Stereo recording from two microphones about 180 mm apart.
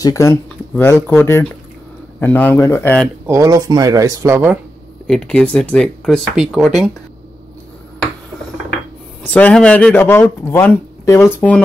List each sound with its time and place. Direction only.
0.0 s speech: 20° left (ahead or behind)
3.3 s speech: 15° right (ahead or behind)
5.0 s speech: 5° left (ahead or behind)
9.2 s speech: 10° left (ahead or behind)